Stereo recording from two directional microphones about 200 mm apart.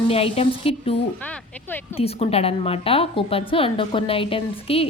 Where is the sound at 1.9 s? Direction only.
30° left (ahead or behind).